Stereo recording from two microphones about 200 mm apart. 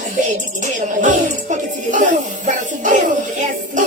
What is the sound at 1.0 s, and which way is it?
Speech, 40° right (ahead or behind).